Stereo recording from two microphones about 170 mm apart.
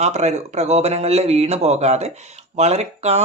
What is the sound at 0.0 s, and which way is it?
Speech, 40° right (ahead or behind).